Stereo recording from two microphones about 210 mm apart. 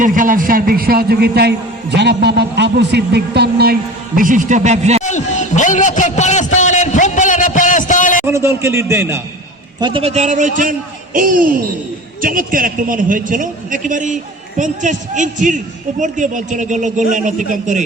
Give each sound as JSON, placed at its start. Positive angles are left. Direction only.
{"t": 0.0, "sound": "a man's voice", "side_deg": -40}
{"t": 5.0, "sound": "a man's voice", "side_deg": 35}
{"t": 6.6, "sound": "a sound", "side_deg": 35}
{"t": 8.3, "sound": "a man's voice", "side_deg": -10}
{"t": 9.8, "sound": "a man's voice", "side_deg": -25}